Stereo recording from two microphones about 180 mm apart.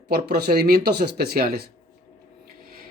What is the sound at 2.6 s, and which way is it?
Printer, 55° right (ahead or behind).